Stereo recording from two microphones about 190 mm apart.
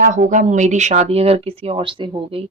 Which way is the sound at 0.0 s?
45° right (ahead or behind).